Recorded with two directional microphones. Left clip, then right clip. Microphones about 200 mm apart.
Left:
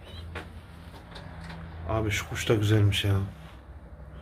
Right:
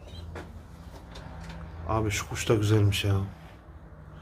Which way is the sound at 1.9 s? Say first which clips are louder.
Even; 5° right (ahead or behind).